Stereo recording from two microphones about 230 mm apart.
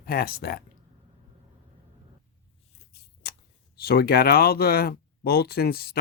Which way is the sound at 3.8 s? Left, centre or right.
Left.